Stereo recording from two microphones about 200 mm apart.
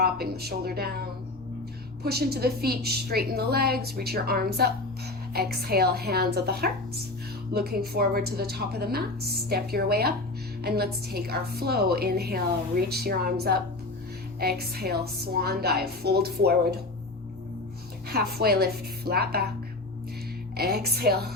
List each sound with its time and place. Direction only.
0.0 s a woman's voice: 50° right (ahead or behind)
2.0 s a woman's voice: 50° right (ahead or behind)
18.3 s a woman's voice: 50° right (ahead or behind)
20.6 s a woman's voice: 50° right (ahead or behind)